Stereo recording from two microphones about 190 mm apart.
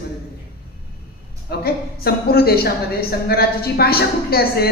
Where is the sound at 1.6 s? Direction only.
55° left (ahead or behind).